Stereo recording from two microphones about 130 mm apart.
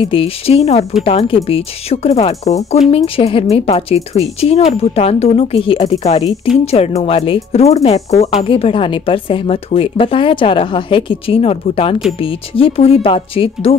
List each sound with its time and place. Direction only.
0.1 s speech: 50° left (ahead or behind)